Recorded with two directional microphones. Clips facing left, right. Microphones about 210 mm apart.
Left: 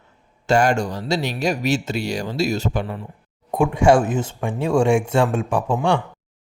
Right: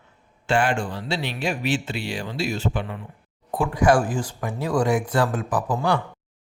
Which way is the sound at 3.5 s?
25° left (ahead or behind).